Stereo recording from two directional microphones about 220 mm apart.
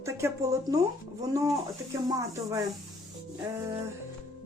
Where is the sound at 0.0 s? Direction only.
15° right (ahead or behind).